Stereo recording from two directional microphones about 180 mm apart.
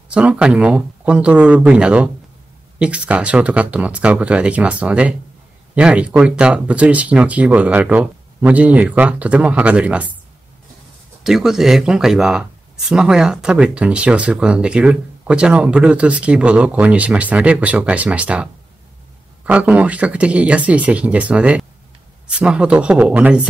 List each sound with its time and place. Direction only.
0.1 s speech: 5° right (ahead or behind)
11.2 s speech: centre (ahead or behind)